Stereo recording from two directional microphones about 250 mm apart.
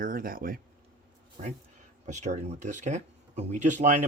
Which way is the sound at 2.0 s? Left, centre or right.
Right.